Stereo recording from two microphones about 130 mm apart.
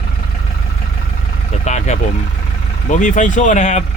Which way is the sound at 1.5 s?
60° left (ahead or behind).